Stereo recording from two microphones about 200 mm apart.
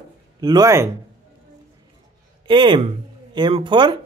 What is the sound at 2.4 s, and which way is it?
Speech, 20° right (ahead or behind).